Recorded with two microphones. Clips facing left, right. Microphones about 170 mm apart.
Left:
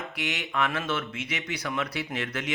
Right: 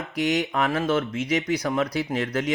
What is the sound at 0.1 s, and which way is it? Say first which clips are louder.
Speech: right 9 dB; 40° right (ahead or behind).